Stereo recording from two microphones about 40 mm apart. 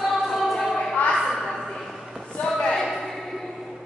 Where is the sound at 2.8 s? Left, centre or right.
Centre.